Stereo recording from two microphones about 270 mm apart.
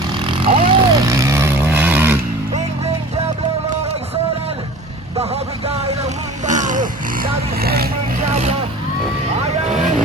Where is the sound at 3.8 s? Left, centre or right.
Right.